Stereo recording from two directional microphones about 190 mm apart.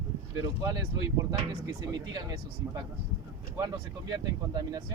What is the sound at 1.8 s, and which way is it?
Speech, 20° right (ahead or behind).